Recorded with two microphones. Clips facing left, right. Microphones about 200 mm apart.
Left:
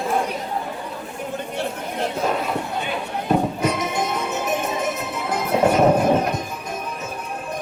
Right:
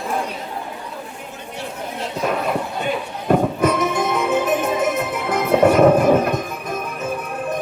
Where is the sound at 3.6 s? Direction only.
55° right (ahead or behind).